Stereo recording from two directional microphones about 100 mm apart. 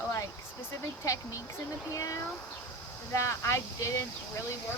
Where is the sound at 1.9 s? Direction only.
35° left (ahead or behind).